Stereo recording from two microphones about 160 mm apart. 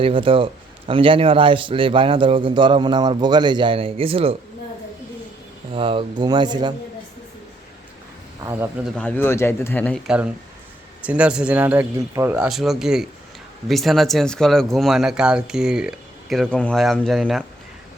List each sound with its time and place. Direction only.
0.0 s a man's voice: 35° right (ahead or behind)
5.7 s speech: 35° right (ahead or behind)
9.0 s speech: 10° left (ahead or behind)
10.1 s speech: 5° right (ahead or behind)
12.5 s speech: centre (ahead or behind)